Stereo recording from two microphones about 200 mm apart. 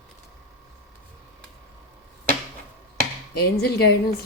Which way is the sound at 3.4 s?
55° left (ahead or behind).